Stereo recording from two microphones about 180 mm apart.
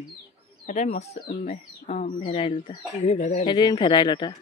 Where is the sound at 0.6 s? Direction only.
40° left (ahead or behind).